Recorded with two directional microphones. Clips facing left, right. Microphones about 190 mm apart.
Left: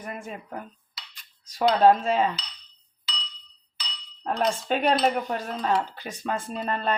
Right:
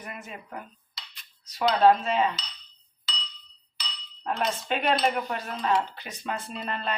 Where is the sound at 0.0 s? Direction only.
45° left (ahead or behind).